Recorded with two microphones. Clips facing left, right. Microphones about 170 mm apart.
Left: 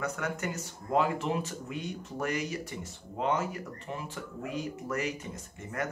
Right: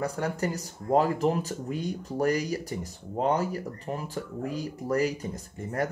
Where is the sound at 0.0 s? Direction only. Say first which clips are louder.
Right 5 dB; 35° right (ahead or behind).